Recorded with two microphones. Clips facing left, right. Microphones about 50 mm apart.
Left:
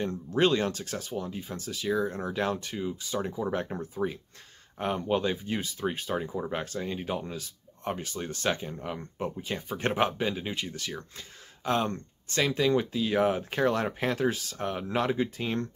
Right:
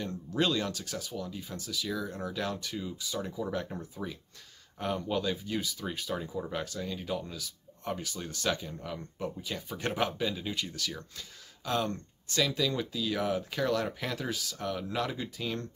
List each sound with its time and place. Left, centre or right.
0.0 s speech: left